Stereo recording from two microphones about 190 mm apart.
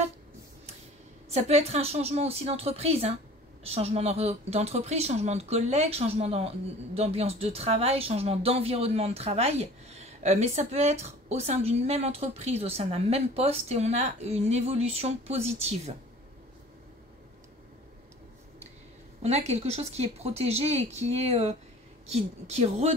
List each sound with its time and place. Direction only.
1.3 s speech: 35° right (ahead or behind)
19.2 s speech: 35° right (ahead or behind)